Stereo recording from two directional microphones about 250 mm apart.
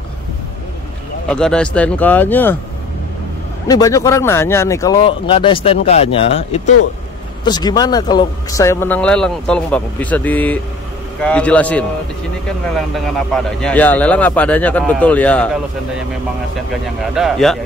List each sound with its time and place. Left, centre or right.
1.3 s a man's voice: centre
3.6 s a man's voice: centre
17.0 s a man's voice: centre